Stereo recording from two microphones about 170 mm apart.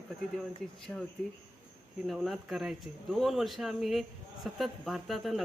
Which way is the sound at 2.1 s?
Centre (ahead or behind).